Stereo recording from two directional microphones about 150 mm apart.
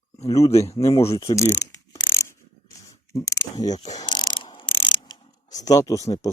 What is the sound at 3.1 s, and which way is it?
Speech, 25° left (ahead or behind).